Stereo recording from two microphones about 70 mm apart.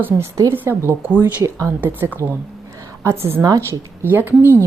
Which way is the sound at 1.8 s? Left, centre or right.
Right.